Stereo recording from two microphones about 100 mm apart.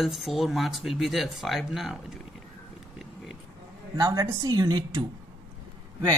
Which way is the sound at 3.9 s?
40° right (ahead or behind).